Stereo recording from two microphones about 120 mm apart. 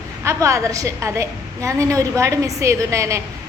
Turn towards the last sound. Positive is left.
turn(degrees=-25)  # may be behind; listen again after turning